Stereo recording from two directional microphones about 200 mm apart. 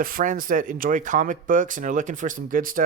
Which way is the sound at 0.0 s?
45° right (ahead or behind).